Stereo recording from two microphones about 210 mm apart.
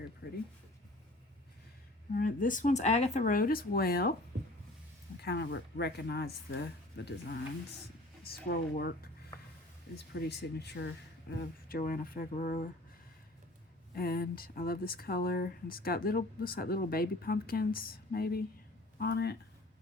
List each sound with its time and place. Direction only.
0.2 s speech: 50° left (ahead or behind)
2.1 s speech: 40° left (ahead or behind)
5.2 s speech: 50° left (ahead or behind)
10.2 s speech: 50° left (ahead or behind)
13.9 s speech: 45° left (ahead or behind)